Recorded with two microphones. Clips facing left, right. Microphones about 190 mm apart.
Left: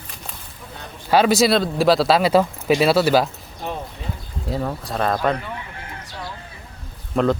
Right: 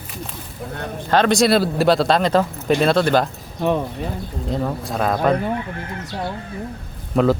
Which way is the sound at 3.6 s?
60° right (ahead or behind).